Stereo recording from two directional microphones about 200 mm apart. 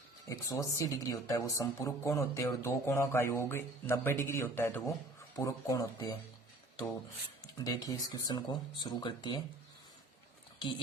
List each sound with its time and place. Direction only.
0.3 s speech: 15° left (ahead or behind)
7.6 s speech: 20° left (ahead or behind)